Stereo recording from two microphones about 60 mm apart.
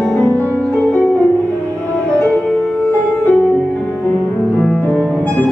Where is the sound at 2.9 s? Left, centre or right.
Left.